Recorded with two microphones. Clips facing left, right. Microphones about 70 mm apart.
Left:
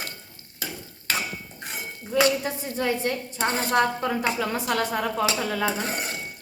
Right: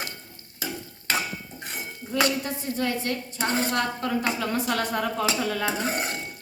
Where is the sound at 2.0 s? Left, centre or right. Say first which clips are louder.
Left 3 dB; centre.